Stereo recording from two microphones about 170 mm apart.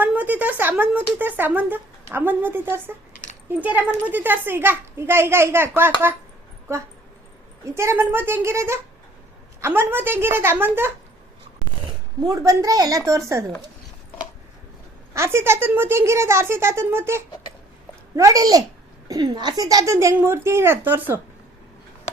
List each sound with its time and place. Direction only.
0.0 s speech: 10° right (ahead or behind)
12.2 s a woman's voice: 20° right (ahead or behind)
15.1 s a woman's voice: 15° right (ahead or behind)